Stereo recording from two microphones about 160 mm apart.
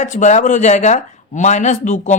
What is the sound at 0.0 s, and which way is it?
Speech, 50° left (ahead or behind).